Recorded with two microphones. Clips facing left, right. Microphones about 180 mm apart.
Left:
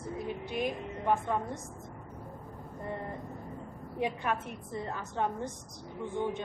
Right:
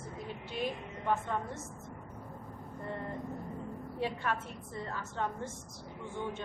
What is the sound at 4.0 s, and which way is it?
A woman's voice, 15° left (ahead or behind).